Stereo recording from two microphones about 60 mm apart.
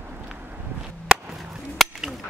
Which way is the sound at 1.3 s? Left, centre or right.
Centre.